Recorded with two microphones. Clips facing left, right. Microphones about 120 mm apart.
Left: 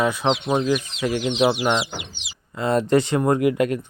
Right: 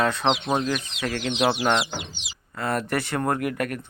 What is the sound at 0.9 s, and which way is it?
Speech, 15° left (ahead or behind).